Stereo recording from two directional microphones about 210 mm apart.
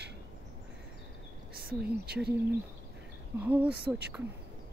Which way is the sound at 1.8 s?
50° right (ahead or behind).